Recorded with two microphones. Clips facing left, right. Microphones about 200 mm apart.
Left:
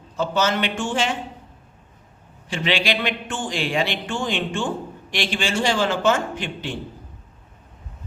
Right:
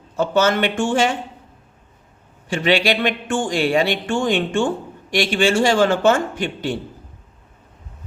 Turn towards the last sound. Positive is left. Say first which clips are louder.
# right 5 dB
turn(degrees=-45)  # may be behind; listen again after turning